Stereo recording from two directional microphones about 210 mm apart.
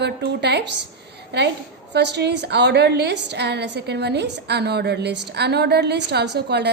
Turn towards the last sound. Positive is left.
turn(degrees=-55)  # may be behind; listen again after turning